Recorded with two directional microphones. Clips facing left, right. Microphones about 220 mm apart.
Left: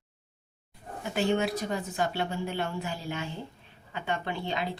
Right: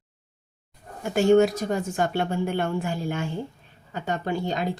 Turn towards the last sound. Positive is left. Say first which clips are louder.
# right 6 dB
turn(degrees=-45)  # may be behind; listen again after turning